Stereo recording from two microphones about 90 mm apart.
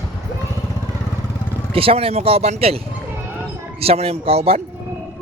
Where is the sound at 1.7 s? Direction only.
90° right.